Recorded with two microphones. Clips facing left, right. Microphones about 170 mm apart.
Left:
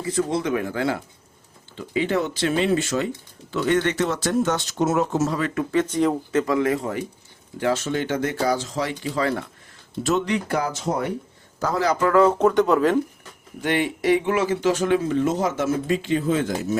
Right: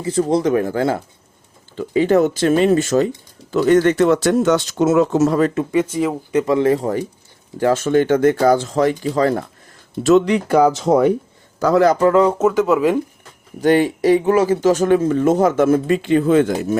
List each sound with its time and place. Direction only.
0.0 s speech: 30° right (ahead or behind); by 5.4 s 70° right (ahead or behind)
5.7 s speech: 10° right (ahead or behind)
6.3 s speech: 25° right (ahead or behind)
7.6 s speech: 50° right (ahead or behind)
10.0 s speech: 80° right
11.8 s speech: 50° right (ahead or behind)
12.0 s speech: 20° right (ahead or behind)
12.4 s speech: 5° right (ahead or behind)
13.6 s speech: 40° right (ahead or behind); by 16.7 s 60° right (ahead or behind)